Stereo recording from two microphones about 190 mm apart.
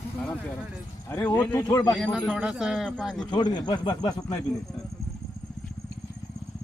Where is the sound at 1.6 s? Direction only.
20° left (ahead or behind).